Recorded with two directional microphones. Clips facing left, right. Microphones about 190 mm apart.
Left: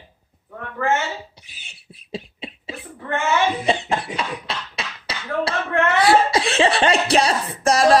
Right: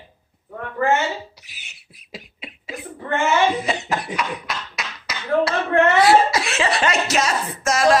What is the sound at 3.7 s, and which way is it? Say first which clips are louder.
Speech: left 3 dB; 30° left (ahead or behind).